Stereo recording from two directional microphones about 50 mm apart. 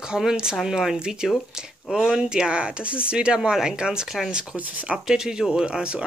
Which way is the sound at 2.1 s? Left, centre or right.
Centre.